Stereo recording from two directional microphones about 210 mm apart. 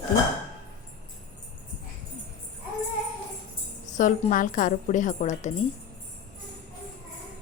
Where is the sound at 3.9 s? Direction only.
35° left (ahead or behind).